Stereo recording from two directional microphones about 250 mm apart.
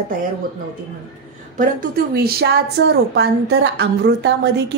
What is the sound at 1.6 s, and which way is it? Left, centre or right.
A woman's voice, right.